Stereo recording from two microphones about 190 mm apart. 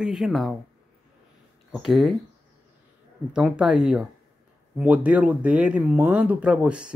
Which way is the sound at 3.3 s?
5° right (ahead or behind).